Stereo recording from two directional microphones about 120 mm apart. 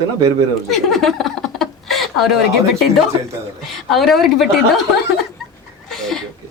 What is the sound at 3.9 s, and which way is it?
Speech, centre (ahead or behind).